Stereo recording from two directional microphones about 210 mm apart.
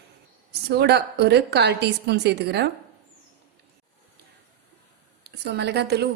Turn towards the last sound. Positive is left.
turn(degrees=-50)  # may be behind; listen again after turning